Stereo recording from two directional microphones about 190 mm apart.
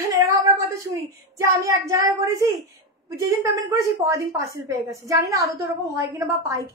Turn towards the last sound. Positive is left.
turn(degrees=-15)  # may be behind; listen again after turning